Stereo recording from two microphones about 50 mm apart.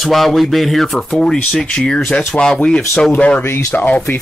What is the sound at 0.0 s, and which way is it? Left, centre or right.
Speech, centre.